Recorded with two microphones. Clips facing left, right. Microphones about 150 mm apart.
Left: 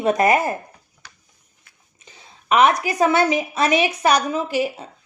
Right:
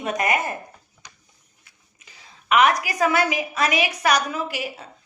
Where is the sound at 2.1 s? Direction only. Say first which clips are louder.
Left 2 dB; 25° left (ahead or behind).